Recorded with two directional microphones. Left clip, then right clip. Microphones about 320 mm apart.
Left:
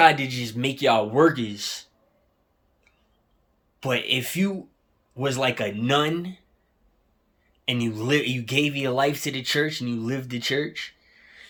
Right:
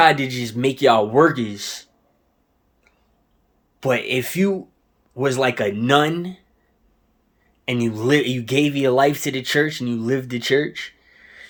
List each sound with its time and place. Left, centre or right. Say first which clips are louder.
0.0 s speech: right 2 dB; centre
3.8 s speech: right 4 dB; centre
7.6 s speech: right 5 dB; centre